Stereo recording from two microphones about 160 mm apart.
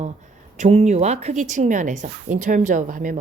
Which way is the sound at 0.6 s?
45° right (ahead or behind).